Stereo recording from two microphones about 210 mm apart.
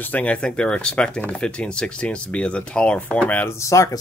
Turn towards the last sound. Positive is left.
turn(degrees=15)  # may be behind; listen again after turning